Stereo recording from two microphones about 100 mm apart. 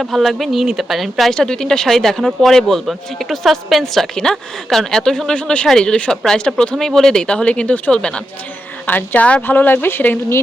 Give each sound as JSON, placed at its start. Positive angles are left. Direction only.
{"t": 0.0, "sound": "speech", "side_deg": 0}